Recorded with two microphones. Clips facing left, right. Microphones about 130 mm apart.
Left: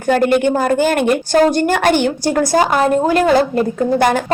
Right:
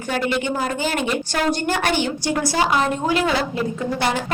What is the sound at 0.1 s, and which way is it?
A woman's voice, 50° left (ahead or behind).